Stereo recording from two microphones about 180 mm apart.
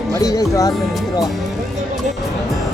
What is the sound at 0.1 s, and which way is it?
Speech, 20° left (ahead or behind).